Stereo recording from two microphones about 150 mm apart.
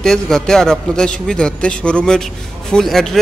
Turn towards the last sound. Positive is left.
turn(degrees=0)  # may be behind; listen again after turning